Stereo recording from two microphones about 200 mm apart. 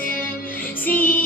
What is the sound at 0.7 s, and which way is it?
Music, 10° left (ahead or behind).